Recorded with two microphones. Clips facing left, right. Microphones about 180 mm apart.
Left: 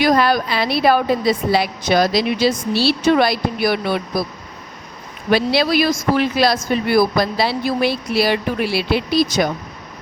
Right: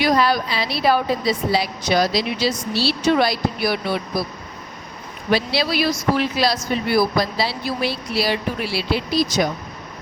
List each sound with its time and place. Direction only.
0.0 s a woman's voice: 50° left (ahead or behind)
5.3 s speech: 55° left (ahead or behind)